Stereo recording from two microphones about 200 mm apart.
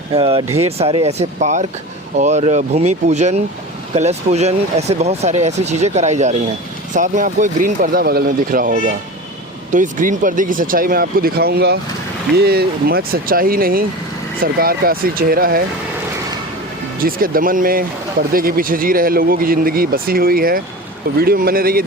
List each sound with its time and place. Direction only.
0.2 s speech: 25° right (ahead or behind); by 15.6 s 45° right (ahead or behind)
17.0 s speech: 45° right (ahead or behind)